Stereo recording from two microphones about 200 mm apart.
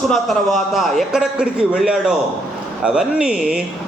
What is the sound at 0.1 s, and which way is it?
A man's voice, centre (ahead or behind).